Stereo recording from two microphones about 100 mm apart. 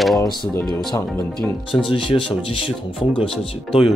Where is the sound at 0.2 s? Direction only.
35° left (ahead or behind).